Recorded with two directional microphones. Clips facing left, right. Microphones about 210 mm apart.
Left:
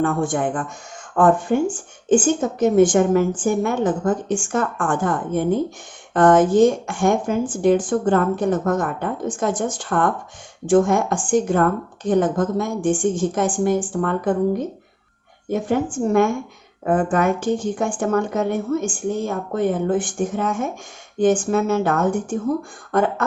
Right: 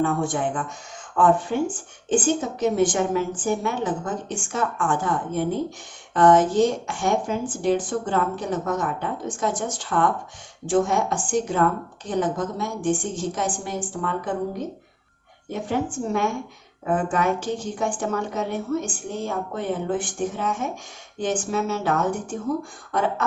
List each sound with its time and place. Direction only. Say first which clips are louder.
0.0 s speech: left 3 dB; 50° left (ahead or behind)
15.4 s speech: left 5 dB; 50° left (ahead or behind)